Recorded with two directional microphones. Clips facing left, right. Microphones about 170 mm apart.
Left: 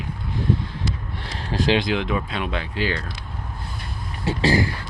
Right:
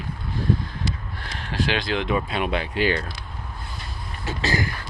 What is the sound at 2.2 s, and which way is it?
Speech, 10° right (ahead or behind).